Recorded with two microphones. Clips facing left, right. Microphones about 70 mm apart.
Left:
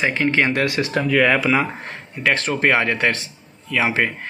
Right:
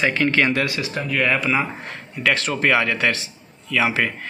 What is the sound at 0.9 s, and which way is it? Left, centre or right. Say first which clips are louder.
Speech: left 7 dB; left.